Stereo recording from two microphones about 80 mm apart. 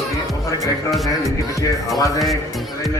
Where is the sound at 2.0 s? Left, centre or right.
Left.